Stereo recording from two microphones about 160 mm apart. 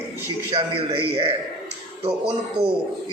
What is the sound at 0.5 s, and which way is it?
Speech, 35° right (ahead or behind).